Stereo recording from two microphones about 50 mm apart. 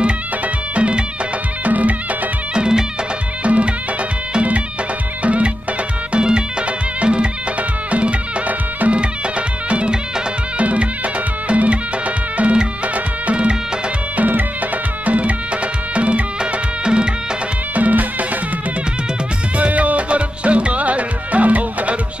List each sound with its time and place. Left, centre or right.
0.7 s music: right
2.5 s music: centre
17.7 s music: right
19.5 s music: right